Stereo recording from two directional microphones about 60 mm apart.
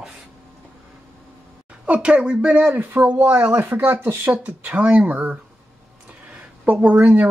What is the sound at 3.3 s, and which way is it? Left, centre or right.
Speech, right.